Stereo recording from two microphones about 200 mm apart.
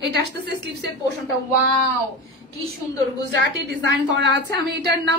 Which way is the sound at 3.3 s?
60° right (ahead or behind).